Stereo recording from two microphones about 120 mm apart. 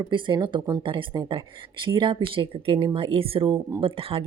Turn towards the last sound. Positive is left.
turn(degrees=-50)  # may be behind; listen again after turning